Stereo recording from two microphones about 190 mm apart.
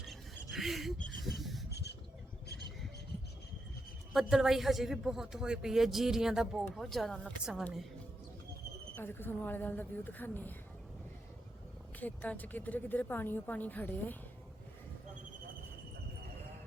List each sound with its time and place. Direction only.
0.1 s a sound: centre (ahead or behind)
1.2 s rub: centre (ahead or behind)
1.7 s a sound: 60° left (ahead or behind)
4.1 s a man's voice: 5° right (ahead or behind)
9.0 s a woman's voice: 10° left (ahead or behind)
11.9 s a woman's voice: 10° left (ahead or behind)